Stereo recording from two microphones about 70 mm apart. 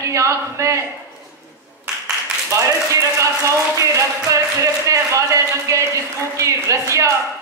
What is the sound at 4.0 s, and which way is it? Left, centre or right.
Speech, right.